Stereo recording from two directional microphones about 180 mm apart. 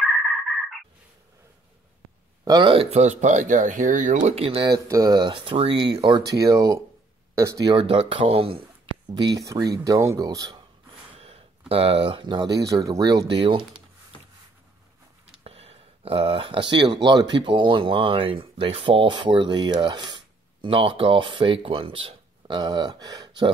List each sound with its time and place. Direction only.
2.4 s speech: 25° right (ahead or behind)
4.6 s speech: 20° right (ahead or behind)
11.1 s a sound: 35° right (ahead or behind)
11.7 s speech: 30° right (ahead or behind)
15.4 s a sound: 35° right (ahead or behind)
17.0 s speech: 25° right (ahead or behind)